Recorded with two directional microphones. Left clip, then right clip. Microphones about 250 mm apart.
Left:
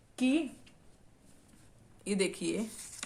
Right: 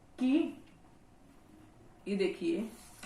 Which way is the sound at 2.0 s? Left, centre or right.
Left.